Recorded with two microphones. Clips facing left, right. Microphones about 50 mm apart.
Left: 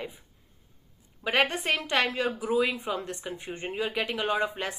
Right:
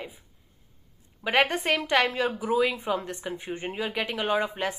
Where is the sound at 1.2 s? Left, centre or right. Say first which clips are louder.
Right 2 dB; right.